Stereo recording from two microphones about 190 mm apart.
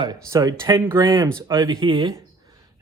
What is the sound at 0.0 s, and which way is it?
Speech, 20° right (ahead or behind).